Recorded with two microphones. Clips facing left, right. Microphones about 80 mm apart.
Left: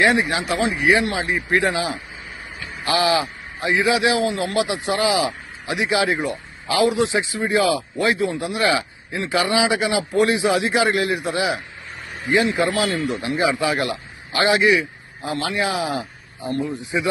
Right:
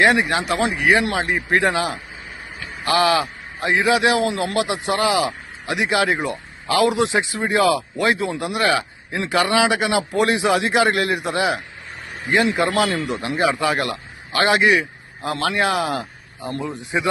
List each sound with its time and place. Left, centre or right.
0.0 s a man's voice: right
1.5 s a man's voice: right
6.7 s a man's voice: right
7.5 s speech: right
13.0 s speech: centre
13.2 s a man's voice: right
14.4 s speech: right
16.5 s a man's voice: right